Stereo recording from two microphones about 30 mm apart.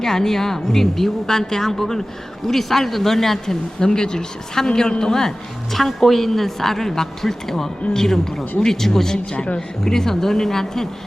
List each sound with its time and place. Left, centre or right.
0.0 s a woman's voice: centre
5.7 s a woman's voice: centre